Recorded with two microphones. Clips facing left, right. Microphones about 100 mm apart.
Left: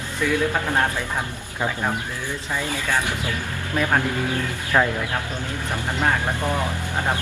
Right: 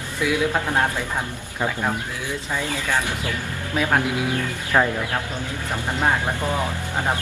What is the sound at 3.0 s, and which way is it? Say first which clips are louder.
Speech: even; 20° left (ahead or behind).